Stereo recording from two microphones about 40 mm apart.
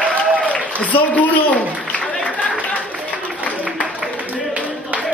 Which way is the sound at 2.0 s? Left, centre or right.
Left.